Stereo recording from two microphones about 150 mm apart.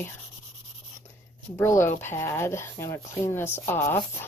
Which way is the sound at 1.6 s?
15° left (ahead or behind).